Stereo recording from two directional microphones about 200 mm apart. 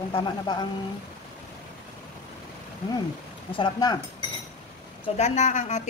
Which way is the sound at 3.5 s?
20° left (ahead or behind).